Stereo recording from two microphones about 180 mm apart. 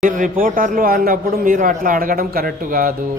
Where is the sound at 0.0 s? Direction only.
50° right (ahead or behind).